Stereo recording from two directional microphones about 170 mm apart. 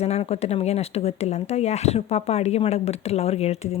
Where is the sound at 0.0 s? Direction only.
40° left (ahead or behind).